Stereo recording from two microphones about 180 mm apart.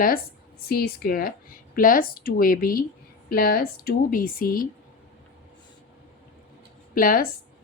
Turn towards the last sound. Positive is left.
turn(degrees=55)  # may be behind; listen again after turning